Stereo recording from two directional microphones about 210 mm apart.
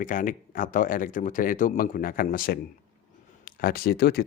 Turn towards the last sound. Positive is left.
turn(degrees=50)  # may be behind; listen again after turning